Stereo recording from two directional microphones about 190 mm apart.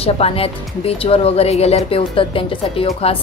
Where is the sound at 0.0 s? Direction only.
30° left (ahead or behind).